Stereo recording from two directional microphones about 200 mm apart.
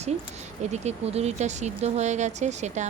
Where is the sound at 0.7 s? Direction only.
35° right (ahead or behind).